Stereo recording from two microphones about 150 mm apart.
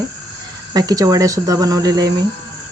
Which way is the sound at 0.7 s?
25° right (ahead or behind).